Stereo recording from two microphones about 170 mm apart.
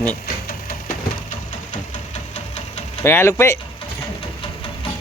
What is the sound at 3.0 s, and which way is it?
Speech, 15° left (ahead or behind).